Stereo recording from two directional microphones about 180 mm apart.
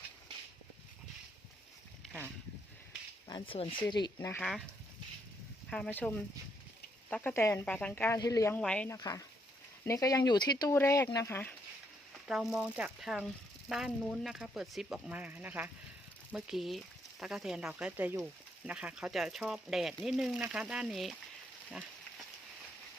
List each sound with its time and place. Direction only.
3.2 s speech: 25° left (ahead or behind)
4.4 s speech: centre (ahead or behind)
5.7 s speech: 5° left (ahead or behind)
9.0 s speech: 20° left (ahead or behind)
12.3 s speech: 5° right (ahead or behind)